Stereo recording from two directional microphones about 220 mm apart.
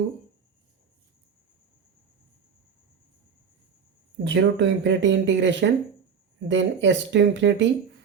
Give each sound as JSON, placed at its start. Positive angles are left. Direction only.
{"t": 4.2, "sound": "speech", "side_deg": -55}